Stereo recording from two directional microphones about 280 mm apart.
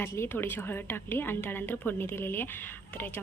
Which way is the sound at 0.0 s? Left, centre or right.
Centre.